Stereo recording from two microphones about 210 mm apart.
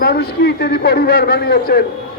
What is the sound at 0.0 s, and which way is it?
A man's voice, 50° left (ahead or behind).